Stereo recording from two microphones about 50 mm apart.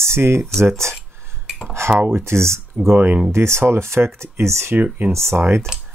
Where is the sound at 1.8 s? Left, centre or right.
Right.